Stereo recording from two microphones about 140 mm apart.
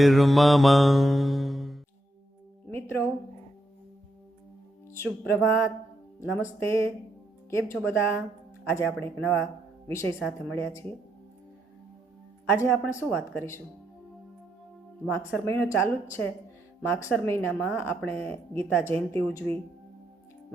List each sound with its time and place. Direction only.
0.0 s mantra: centre (ahead or behind)
2.6 s music: 15° left (ahead or behind)
4.9 s speech: 15° left (ahead or behind)
12.5 s speech: 15° left (ahead or behind)
15.3 s speech: 15° left (ahead or behind)